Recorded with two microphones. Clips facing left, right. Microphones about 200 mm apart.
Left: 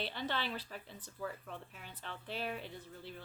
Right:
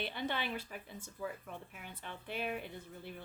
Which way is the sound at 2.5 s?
55° right (ahead or behind).